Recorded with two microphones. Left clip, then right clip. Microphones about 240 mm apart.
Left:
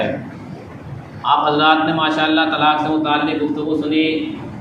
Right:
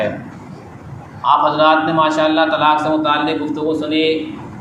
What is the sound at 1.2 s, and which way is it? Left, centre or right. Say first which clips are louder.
A man's voice: right 2 dB; right.